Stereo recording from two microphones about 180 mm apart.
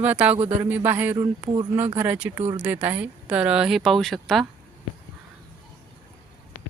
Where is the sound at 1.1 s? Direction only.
20° right (ahead or behind); by 4.4 s centre (ahead or behind).